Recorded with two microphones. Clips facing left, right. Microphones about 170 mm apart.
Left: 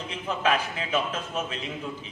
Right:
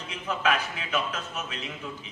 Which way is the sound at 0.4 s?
30° left (ahead or behind).